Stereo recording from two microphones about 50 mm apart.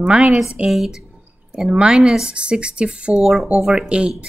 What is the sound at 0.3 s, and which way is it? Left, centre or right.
Speech, centre.